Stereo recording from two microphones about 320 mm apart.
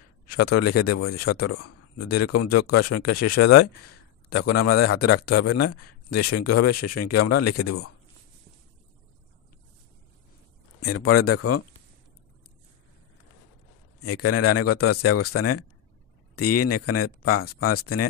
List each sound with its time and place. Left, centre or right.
0.4 s speech: left
10.8 s speech: left
14.0 s speech: left